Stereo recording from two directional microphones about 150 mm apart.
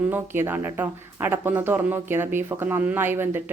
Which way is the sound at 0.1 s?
15° right (ahead or behind).